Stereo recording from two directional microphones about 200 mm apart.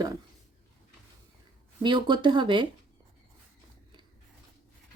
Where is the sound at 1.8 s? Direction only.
25° right (ahead or behind).